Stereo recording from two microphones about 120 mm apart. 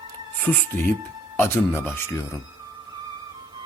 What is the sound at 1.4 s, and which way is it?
Speech, 20° left (ahead or behind).